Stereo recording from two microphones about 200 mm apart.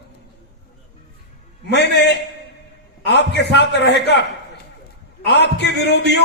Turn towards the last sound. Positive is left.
turn(degrees=60)  # may be behind; listen again after turning